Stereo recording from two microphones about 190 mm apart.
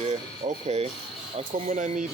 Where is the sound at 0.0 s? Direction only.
35° right (ahead or behind).